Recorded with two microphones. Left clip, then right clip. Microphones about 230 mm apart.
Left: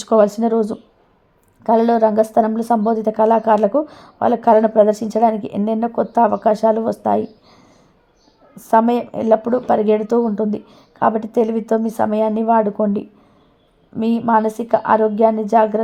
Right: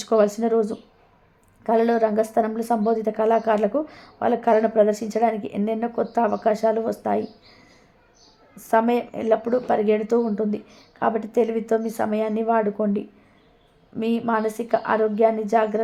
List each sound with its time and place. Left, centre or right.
0.0 s speech: left